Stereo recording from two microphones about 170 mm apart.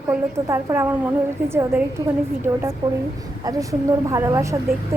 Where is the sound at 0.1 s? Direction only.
15° right (ahead or behind).